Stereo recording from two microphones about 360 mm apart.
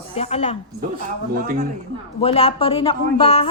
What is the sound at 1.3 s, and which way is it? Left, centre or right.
Speech, right.